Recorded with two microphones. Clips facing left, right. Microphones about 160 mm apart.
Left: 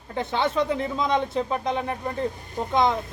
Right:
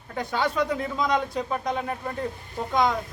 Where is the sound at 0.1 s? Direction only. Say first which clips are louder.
Left 2 dB; 25° left (ahead or behind).